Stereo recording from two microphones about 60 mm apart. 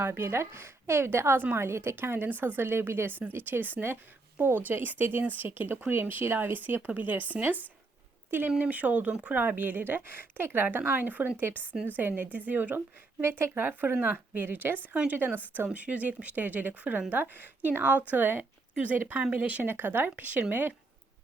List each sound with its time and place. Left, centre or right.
0.0 s a woman's voice: right
19.6 s speech: right